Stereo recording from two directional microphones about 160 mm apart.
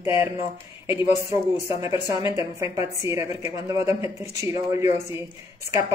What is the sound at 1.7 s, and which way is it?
A woman's voice, 20° right (ahead or behind).